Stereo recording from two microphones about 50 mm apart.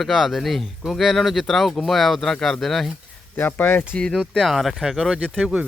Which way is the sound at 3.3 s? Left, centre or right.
Left.